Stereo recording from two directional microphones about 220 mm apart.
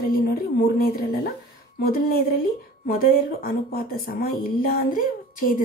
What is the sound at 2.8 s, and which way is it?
A woman's voice, 40° left (ahead or behind).